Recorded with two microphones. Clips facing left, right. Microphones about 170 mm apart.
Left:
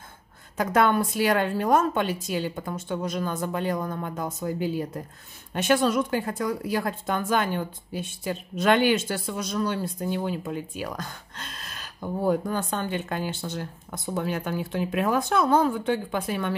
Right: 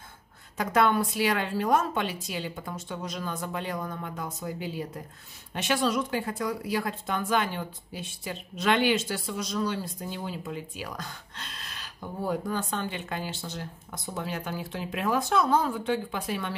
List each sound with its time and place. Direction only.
0.6 s speech: 50° left (ahead or behind)